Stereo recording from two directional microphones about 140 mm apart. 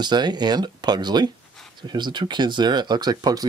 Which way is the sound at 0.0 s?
30° right (ahead or behind).